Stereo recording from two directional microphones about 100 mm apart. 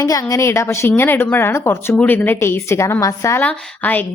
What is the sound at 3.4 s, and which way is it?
Speech, 15° left (ahead or behind).